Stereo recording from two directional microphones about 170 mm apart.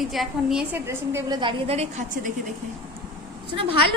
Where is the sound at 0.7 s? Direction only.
15° right (ahead or behind).